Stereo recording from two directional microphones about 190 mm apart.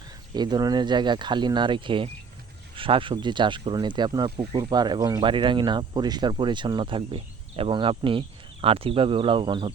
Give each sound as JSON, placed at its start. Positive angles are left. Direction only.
{"t": 0.3, "sound": "speech", "side_deg": -20}